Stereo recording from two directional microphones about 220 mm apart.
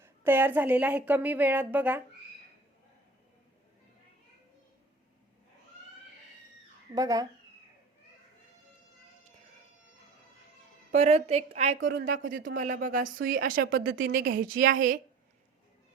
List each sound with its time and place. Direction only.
0.0 s a woman's voice: 10° right (ahead or behind)
6.9 s a woman's voice: 15° right (ahead or behind)
10.9 s a woman's voice: 30° right (ahead or behind)
11.8 s speech: 55° right (ahead or behind)
12.5 s a woman's voice: 35° right (ahead or behind)